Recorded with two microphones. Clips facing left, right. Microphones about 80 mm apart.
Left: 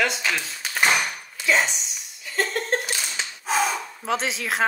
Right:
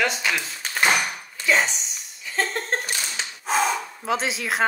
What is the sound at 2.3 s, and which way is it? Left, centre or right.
Laughter, right.